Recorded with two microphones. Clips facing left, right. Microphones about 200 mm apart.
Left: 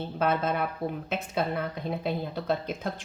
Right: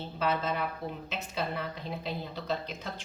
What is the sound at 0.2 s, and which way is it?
A woman's voice, 50° left (ahead or behind).